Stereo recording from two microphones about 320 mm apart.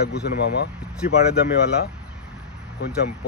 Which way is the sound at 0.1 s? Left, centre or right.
Left.